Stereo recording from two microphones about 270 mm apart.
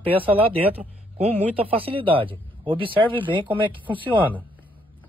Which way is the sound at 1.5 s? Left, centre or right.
Right.